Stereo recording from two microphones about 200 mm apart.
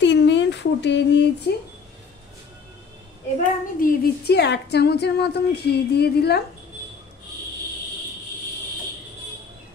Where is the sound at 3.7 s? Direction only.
50° left (ahead or behind).